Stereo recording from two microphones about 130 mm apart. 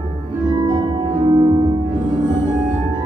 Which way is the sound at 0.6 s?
35° right (ahead or behind).